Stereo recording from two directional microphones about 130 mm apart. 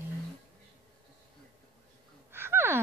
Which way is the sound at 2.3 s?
20° right (ahead or behind).